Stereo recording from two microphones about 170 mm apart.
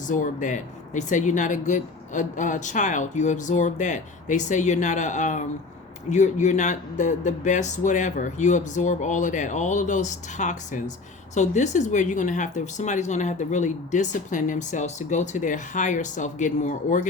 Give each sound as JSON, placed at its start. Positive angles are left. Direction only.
{"t": 0.1, "sound": "speech", "side_deg": 50}